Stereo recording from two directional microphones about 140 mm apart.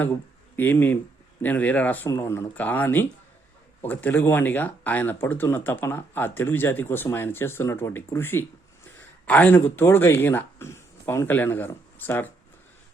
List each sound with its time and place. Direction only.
0.5 s speech: 15° left (ahead or behind)